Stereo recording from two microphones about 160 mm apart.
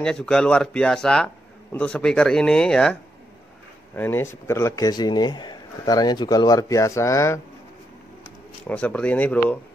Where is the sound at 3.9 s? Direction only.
15° left (ahead or behind).